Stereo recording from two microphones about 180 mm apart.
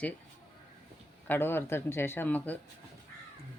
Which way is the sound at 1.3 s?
10° left (ahead or behind).